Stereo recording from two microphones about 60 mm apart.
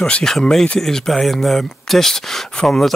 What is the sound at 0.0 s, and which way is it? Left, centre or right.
Speech, centre.